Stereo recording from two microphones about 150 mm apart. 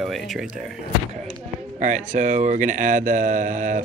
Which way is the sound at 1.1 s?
55° right (ahead or behind).